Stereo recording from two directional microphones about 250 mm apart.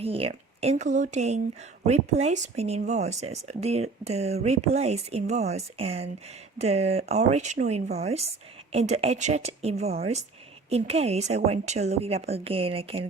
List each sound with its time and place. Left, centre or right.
0.0 s speech: right